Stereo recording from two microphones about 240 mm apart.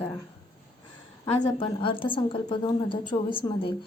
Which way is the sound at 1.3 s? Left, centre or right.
Left.